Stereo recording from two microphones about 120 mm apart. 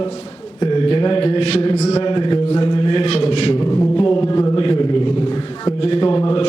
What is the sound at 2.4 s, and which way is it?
Mantra, 60° left (ahead or behind).